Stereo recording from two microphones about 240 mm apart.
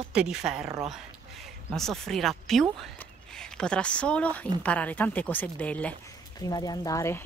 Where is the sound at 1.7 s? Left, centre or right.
Centre.